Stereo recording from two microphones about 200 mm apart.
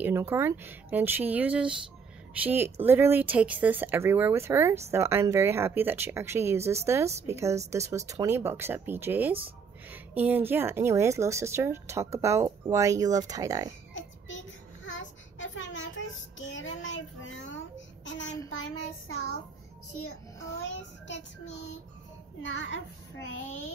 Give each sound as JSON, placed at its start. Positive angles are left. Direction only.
{"t": 0.0, "sound": "a woman's voice", "side_deg": -10}
{"t": 13.9, "sound": "child singing", "side_deg": 70}
{"t": 21.1, "sound": "a child's voice", "side_deg": 60}